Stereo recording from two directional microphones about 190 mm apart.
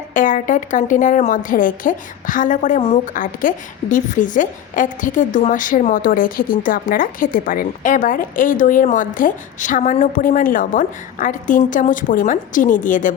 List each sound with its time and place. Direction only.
0.1 s a woman's voice: 45° left (ahead or behind)